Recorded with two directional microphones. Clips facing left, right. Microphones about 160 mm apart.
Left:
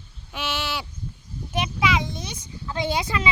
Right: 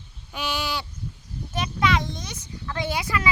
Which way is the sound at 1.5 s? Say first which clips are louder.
Even; 5° left (ahead or behind).